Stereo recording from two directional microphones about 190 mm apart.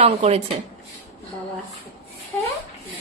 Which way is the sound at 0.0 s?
35° right (ahead or behind).